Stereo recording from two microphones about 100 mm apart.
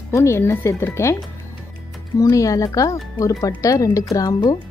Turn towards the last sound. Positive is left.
turn(degrees=40)  # may be behind; listen again after turning